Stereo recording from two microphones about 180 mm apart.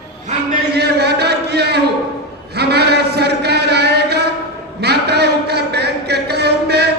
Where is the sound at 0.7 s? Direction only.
65° right (ahead or behind).